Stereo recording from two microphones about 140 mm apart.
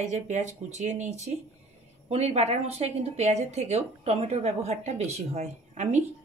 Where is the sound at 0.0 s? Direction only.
55° right (ahead or behind).